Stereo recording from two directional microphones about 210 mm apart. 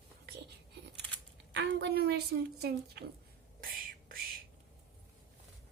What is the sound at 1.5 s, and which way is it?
Speech, 55° right (ahead or behind).